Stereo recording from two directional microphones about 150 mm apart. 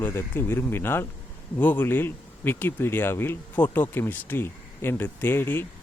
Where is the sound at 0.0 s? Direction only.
15° left (ahead or behind).